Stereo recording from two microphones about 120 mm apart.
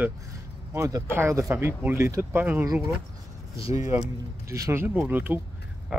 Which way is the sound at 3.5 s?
25° right (ahead or behind).